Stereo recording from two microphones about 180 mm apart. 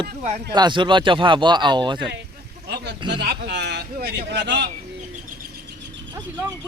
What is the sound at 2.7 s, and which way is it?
Speech, 70° right (ahead or behind).